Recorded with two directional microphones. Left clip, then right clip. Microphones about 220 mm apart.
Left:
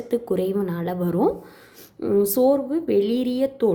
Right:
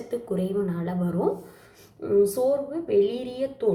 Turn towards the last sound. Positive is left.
turn(degrees=45)  # may be behind; listen again after turning